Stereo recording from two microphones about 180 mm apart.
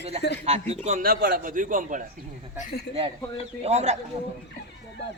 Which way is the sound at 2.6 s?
65° left (ahead or behind).